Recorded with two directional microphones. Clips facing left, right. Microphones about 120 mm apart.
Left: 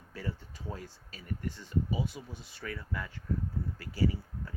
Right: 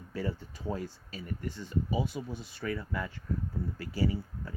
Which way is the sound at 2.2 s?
75° right (ahead or behind).